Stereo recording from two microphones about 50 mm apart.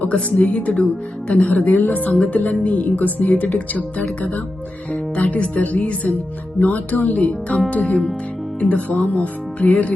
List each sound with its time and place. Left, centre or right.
0.0 s speech: left